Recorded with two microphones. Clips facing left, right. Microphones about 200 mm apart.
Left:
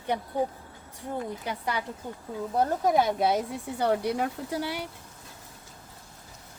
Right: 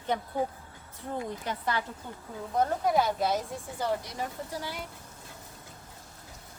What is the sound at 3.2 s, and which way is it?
Speech, 65° left (ahead or behind).